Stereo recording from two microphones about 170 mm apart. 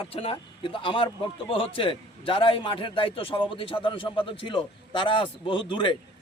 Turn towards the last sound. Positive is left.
turn(degrees=30)  # may be behind; listen again after turning